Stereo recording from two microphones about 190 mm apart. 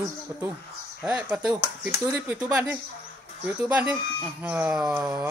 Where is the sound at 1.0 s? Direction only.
5° right (ahead or behind).